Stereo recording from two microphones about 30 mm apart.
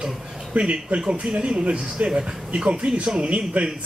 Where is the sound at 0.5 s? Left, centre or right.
Right.